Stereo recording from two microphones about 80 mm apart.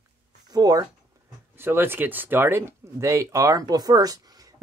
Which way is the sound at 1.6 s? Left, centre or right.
Right.